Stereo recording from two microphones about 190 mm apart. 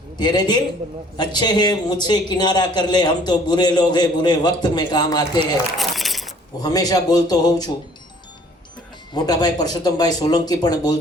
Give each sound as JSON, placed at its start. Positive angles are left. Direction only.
{"t": 0.2, "sound": "a man's voice", "side_deg": 20}
{"t": 5.8, "sound": "a sound", "side_deg": 0}
{"t": 6.6, "sound": "a man's voice", "side_deg": 20}
{"t": 9.1, "sound": "a man's voice", "side_deg": 20}